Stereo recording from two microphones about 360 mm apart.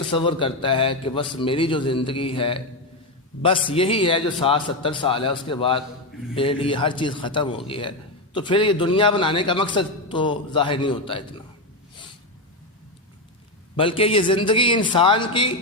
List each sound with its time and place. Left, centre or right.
0.1 s a man's voice: centre
13.7 s a man's voice: centre